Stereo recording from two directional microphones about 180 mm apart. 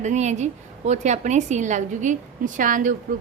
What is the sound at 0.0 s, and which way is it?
A woman's voice, 40° right (ahead or behind).